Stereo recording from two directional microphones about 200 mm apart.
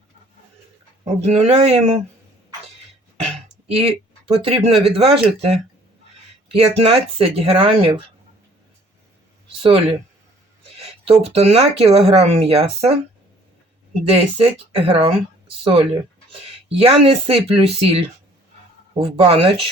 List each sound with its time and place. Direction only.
1.0 s speech: 30° right (ahead or behind)
3.3 s speech: 30° right (ahead or behind)
10.8 s speech: 30° right (ahead or behind)
14.1 s speech: 30° right (ahead or behind)